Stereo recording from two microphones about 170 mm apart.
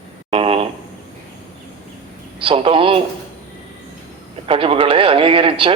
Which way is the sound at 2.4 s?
30° right (ahead or behind).